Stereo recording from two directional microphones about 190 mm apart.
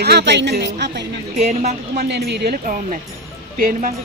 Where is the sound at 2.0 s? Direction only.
60° right (ahead or behind).